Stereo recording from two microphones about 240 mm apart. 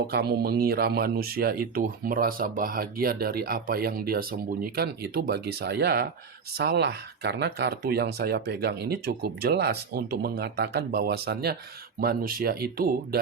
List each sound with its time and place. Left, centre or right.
0.1 s speech: right